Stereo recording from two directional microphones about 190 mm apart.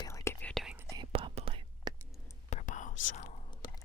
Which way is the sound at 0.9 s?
25° right (ahead or behind).